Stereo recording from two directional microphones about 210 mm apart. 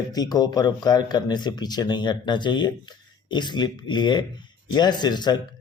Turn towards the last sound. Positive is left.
turn(degrees=20)  # may be behind; listen again after turning